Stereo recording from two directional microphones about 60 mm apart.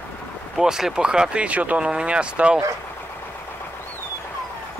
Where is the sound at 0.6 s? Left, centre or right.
Centre.